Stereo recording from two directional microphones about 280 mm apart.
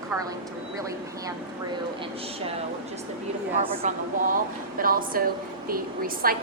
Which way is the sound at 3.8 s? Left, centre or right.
Right.